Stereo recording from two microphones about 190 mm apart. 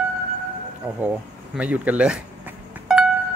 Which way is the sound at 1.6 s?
5° right (ahead or behind).